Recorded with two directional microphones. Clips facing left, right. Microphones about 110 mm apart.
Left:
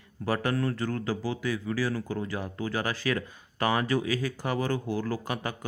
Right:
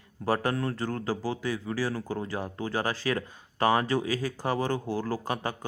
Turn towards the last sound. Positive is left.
turn(degrees=-30)  # may be behind; listen again after turning